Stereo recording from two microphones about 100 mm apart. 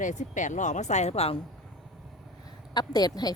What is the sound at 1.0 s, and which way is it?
Speech, 90° left.